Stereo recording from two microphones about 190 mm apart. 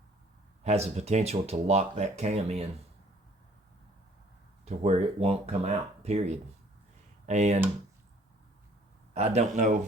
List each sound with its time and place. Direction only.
0.6 s speech: 35° right (ahead or behind)
4.6 s speech: 35° right (ahead or behind)
9.1 s speech: 35° right (ahead or behind)